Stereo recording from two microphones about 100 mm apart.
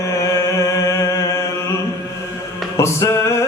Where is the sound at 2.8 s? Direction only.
30° left (ahead or behind).